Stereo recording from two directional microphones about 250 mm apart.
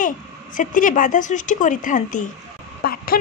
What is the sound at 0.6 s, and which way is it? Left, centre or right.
A woman's voice, left.